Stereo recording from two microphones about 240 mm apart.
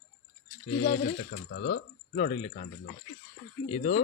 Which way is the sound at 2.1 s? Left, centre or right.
Left.